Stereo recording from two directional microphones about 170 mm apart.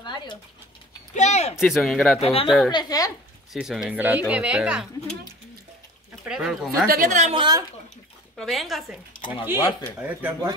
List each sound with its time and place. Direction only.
0.0 s a sound: 25° left (ahead or behind)
1.1 s speech: 45° left (ahead or behind)
1.6 s speech: centre (ahead or behind)
2.1 s speech: 35° left (ahead or behind)
2.7 s a woman's voice: 25° left (ahead or behind)
3.5 s speech: 5° right (ahead or behind)
6.2 s speech: centre (ahead or behind)
6.9 s speech: 50° right (ahead or behind)
7.3 s speech: 25° right (ahead or behind)
8.4 s speech: centre (ahead or behind)
9.6 s a woman's voice: 25° left (ahead or behind)
9.9 s speech: 10° right (ahead or behind)